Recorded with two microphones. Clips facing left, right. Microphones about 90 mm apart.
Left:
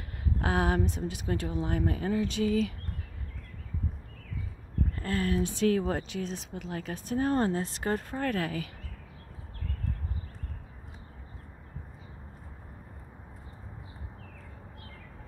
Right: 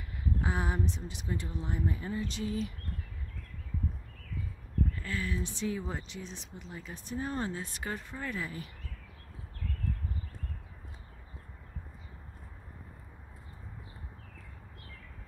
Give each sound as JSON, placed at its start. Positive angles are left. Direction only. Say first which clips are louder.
{"t": 0.4, "sound": "speech", "louder": "left 7 dB", "side_deg": 70}
{"t": 4.9, "sound": "speech", "louder": "left 7 dB", "side_deg": 50}
{"t": 8.2, "sound": "speech", "louder": "left 7 dB", "side_deg": 65}